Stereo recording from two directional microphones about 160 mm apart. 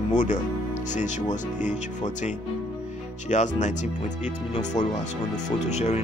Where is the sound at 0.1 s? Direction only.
50° left (ahead or behind).